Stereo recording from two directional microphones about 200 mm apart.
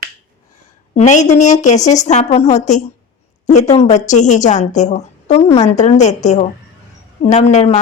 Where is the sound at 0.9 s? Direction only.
35° left (ahead or behind).